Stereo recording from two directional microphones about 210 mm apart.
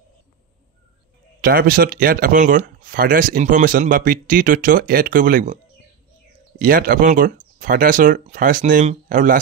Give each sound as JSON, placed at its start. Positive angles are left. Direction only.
{"t": 1.4, "sound": "speech", "side_deg": -45}
{"t": 6.6, "sound": "speech", "side_deg": -40}